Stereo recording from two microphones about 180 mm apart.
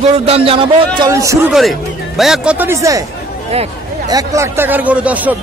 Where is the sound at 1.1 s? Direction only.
15° right (ahead or behind).